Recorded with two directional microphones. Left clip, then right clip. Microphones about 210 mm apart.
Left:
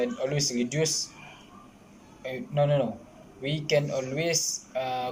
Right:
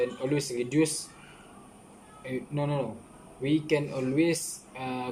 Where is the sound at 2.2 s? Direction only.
20° right (ahead or behind).